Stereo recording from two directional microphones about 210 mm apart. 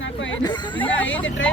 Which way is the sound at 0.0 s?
65° left (ahead or behind).